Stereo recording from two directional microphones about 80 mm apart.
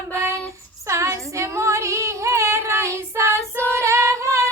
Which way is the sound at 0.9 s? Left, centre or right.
Right.